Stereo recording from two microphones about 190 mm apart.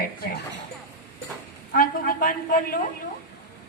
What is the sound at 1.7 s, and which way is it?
A woman's voice, 50° left (ahead or behind).